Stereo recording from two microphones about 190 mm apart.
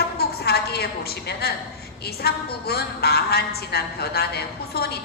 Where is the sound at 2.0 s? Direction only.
55° left (ahead or behind).